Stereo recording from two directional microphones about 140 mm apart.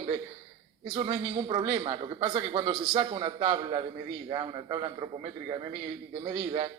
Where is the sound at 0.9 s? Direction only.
45° right (ahead or behind).